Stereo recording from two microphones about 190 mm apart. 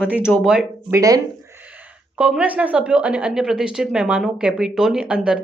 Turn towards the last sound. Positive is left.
turn(degrees=-5)  # may be behind; listen again after turning